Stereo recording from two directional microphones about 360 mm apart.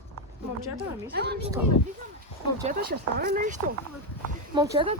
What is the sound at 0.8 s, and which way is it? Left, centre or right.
Speech, right.